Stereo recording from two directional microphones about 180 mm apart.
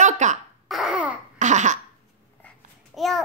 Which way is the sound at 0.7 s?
Centre (ahead or behind).